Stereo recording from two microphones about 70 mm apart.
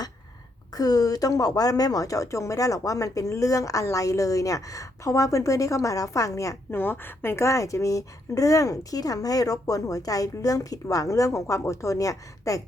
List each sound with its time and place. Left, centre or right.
0.7 s speech: left
6.7 s speech: left